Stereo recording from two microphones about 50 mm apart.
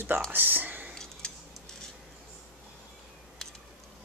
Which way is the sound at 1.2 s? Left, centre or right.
Centre.